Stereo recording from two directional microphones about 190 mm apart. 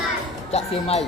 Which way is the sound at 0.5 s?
35° left (ahead or behind).